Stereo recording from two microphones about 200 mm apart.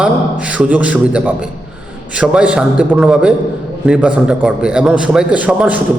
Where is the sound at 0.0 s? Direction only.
5° right (ahead or behind).